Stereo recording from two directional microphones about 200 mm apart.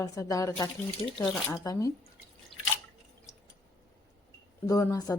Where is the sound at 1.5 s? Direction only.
15° left (ahead or behind).